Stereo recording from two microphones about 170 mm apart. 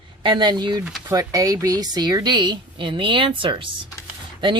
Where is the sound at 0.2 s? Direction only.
25° right (ahead or behind).